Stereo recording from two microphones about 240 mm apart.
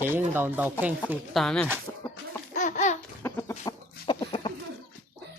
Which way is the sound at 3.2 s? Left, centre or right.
Centre.